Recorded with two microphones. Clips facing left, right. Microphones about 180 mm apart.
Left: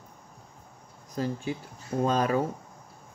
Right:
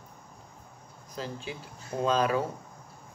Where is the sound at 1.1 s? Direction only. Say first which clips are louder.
Left 6 dB; 45° left (ahead or behind).